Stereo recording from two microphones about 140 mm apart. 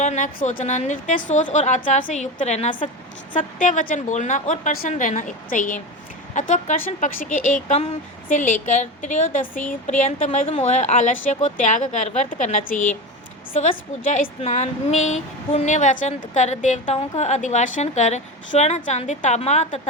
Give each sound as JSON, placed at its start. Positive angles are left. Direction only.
{"t": 0.0, "sound": "speech", "side_deg": 65}
{"t": 0.6, "sound": "a woman's voice", "side_deg": 55}
{"t": 6.3, "sound": "speech", "side_deg": 60}
{"t": 10.4, "sound": "a woman's voice", "side_deg": 45}
{"t": 13.5, "sound": "speech", "side_deg": 55}